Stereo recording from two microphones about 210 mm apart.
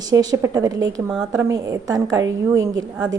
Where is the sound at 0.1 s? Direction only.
15° right (ahead or behind).